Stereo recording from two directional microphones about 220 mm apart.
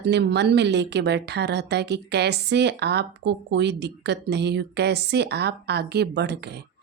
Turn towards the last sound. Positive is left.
turn(degrees=-50)  # may be behind; listen again after turning